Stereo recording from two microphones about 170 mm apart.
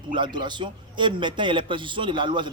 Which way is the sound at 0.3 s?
25° right (ahead or behind).